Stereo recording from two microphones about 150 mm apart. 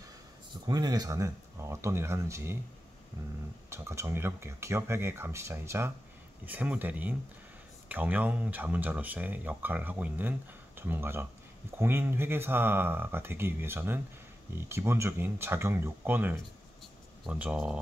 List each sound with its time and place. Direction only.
0.7 s speech: 25° right (ahead or behind)
3.7 s speech: 15° right (ahead or behind)